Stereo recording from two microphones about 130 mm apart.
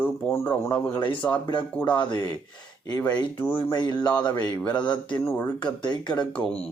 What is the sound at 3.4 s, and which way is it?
Speech, 15° left (ahead or behind).